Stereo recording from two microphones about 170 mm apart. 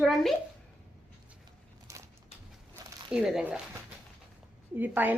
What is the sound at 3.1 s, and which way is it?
Speech, 5° right (ahead or behind).